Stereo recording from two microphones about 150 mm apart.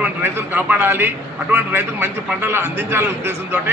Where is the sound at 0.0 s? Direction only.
10° right (ahead or behind).